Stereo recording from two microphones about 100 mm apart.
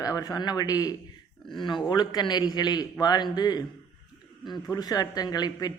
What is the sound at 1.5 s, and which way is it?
A man's voice, 50° left (ahead or behind).